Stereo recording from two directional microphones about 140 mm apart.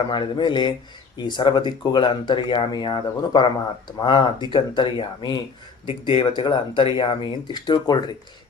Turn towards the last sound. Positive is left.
turn(degrees=30)  # may be behind; listen again after turning